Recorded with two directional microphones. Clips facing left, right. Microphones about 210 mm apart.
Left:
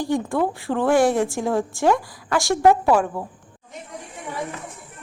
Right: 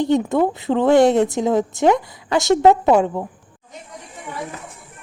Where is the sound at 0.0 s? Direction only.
20° right (ahead or behind).